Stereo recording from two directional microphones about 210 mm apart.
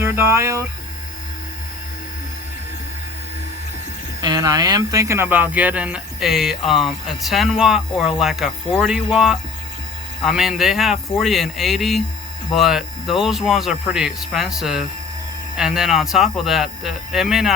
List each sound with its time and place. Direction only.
0.0 s speech: 10° right (ahead or behind)
4.2 s speech: 20° right (ahead or behind); by 17.5 s centre (ahead or behind)